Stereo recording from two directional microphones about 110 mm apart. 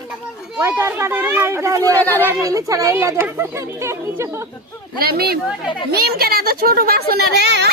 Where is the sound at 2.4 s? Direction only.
30° right (ahead or behind).